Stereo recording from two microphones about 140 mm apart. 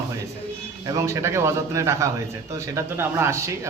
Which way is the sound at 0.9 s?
20° right (ahead or behind).